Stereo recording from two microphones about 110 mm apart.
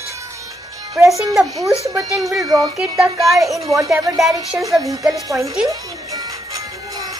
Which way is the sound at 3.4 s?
Centre (ahead or behind).